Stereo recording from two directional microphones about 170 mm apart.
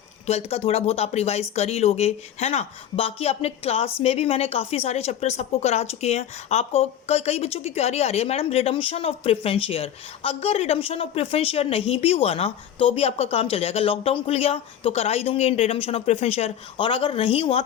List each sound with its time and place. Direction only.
0.3 s speech: 35° left (ahead or behind)